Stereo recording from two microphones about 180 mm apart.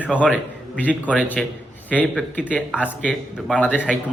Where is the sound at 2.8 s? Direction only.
5° left (ahead or behind).